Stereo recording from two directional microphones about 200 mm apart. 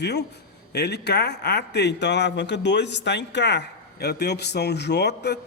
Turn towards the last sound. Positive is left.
turn(degrees=55)  # may be behind; listen again after turning